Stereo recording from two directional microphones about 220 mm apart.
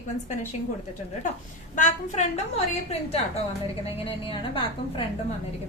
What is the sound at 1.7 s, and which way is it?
A woman's voice, 30° left (ahead or behind).